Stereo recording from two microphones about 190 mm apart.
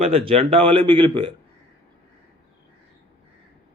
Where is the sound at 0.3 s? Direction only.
30° right (ahead or behind).